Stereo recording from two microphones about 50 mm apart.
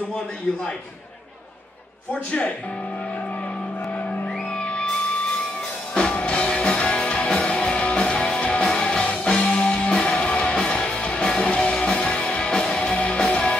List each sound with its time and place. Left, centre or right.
4.1 s music: left
5.9 s music: left